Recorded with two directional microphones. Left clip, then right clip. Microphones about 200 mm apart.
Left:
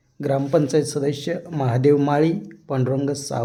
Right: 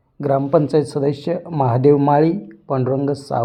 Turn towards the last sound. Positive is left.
turn(degrees=0)  # may be behind; listen again after turning